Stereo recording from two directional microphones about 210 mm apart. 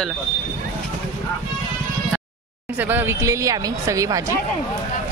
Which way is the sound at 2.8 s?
10° right (ahead or behind).